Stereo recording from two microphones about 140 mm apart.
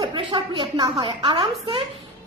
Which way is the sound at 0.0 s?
35° right (ahead or behind).